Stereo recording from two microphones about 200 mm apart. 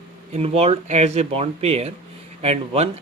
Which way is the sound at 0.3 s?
30° right (ahead or behind).